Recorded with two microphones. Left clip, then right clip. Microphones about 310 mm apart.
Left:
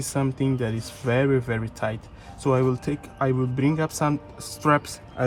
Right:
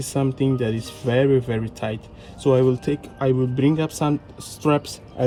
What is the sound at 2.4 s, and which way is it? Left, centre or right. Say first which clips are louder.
Speech: right 5 dB; left.